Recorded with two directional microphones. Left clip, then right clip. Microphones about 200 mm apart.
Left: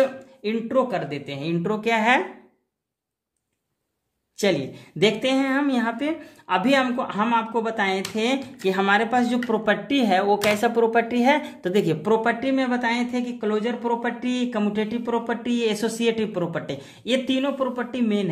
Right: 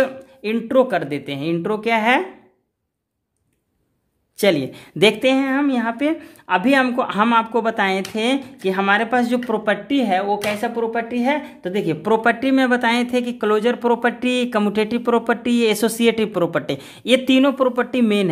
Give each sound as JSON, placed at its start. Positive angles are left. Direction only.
{"t": 0.0, "sound": "speech", "side_deg": -35}
{"t": 4.4, "sound": "speech", "side_deg": -30}
{"t": 12.0, "sound": "speech", "side_deg": -25}